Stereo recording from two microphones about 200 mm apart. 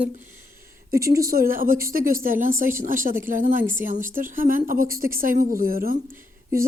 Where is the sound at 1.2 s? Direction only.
45° right (ahead or behind).